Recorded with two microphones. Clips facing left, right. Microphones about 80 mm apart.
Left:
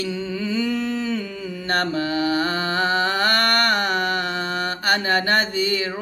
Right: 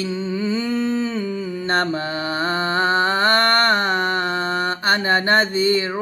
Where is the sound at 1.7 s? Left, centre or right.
Right.